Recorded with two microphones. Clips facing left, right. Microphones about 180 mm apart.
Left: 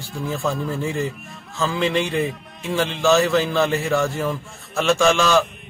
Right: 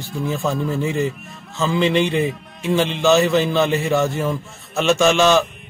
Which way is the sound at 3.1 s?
20° right (ahead or behind).